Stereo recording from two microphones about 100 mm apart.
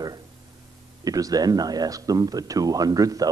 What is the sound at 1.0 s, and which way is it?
Speech, 40° right (ahead or behind).